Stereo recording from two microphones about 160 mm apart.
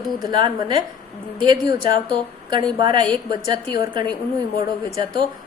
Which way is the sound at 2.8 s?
30° right (ahead or behind).